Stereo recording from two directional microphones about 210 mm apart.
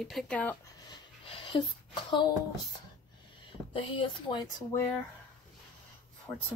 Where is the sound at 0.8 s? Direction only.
20° left (ahead or behind).